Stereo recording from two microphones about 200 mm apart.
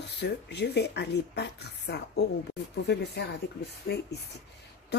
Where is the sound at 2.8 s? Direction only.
55° left (ahead or behind).